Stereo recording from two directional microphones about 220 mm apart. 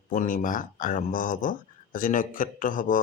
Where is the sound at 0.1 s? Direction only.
35° left (ahead or behind).